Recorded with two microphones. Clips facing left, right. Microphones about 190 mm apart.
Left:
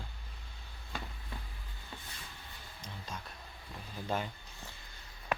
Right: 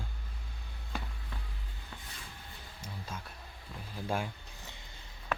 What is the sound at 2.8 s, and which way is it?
Speech, 5° right (ahead or behind).